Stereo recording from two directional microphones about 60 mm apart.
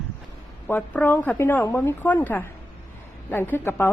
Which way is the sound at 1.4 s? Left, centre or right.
Left.